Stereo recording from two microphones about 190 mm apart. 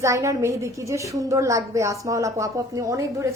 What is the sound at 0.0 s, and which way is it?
A woman's voice, 15° right (ahead or behind).